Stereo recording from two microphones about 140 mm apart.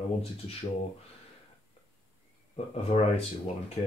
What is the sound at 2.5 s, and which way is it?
Speech, 50° left (ahead or behind).